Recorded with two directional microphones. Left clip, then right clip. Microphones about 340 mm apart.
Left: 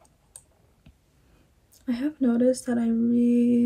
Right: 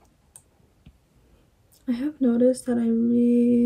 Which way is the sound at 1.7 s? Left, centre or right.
Left.